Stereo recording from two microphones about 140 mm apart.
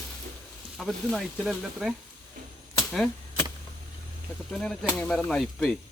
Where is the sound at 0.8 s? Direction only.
Centre (ahead or behind).